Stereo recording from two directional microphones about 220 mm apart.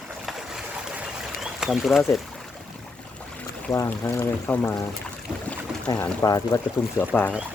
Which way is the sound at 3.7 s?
15° left (ahead or behind).